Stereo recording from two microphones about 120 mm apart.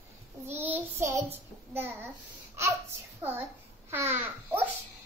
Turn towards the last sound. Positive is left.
turn(degrees=-15)  # may be behind; listen again after turning